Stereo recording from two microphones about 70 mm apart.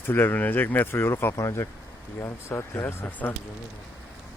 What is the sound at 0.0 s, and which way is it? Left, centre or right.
Speech, left.